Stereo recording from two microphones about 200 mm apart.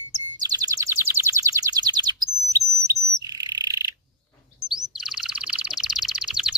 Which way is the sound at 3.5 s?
20° right (ahead or behind).